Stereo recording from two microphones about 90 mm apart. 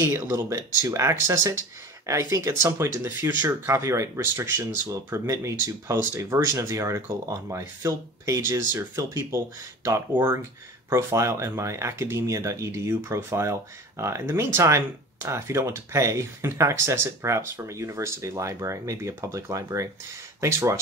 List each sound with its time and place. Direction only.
0.1 s speech: 35° right (ahead or behind)